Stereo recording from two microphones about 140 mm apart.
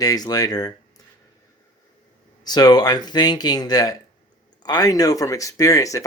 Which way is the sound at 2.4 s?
30° left (ahead or behind).